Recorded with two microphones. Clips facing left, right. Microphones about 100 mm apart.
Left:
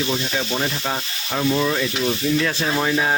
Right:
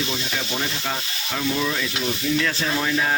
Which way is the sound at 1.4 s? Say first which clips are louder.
Left 4 dB; 30° left (ahead or behind).